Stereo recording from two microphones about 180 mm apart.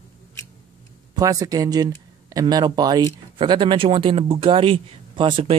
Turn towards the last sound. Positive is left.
turn(degrees=-25)  # may be behind; listen again after turning